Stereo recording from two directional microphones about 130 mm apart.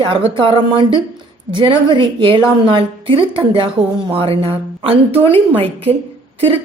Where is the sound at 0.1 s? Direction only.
40° right (ahead or behind).